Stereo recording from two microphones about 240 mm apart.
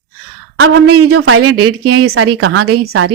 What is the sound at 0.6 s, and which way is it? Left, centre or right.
Speech, right.